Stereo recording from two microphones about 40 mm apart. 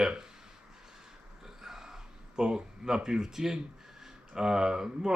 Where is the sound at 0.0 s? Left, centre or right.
Centre.